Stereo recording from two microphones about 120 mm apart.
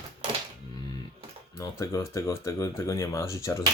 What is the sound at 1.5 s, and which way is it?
Speech, 25° left (ahead or behind).